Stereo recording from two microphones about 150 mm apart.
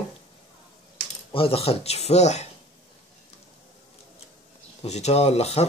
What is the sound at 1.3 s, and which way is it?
Speech, 40° left (ahead or behind).